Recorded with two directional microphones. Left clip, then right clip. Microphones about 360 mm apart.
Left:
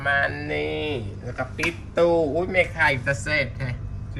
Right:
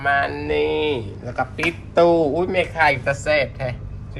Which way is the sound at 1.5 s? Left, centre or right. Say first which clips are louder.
Right 5 dB; right.